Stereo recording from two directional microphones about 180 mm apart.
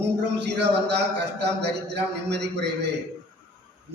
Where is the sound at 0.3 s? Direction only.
70° right (ahead or behind).